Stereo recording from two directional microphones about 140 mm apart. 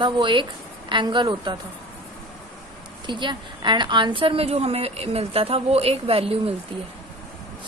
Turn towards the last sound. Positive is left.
turn(degrees=-45)  # may be behind; listen again after turning